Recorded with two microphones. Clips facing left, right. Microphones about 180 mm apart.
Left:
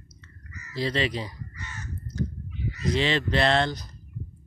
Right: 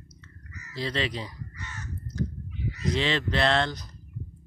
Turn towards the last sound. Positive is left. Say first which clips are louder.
# left 2 dB
turn(degrees=10)  # may be behind; listen again after turning